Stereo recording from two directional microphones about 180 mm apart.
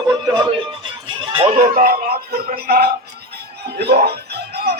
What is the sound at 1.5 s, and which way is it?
Speech, 50° right (ahead or behind).